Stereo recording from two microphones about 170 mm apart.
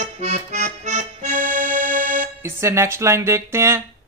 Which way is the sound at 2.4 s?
15° right (ahead or behind).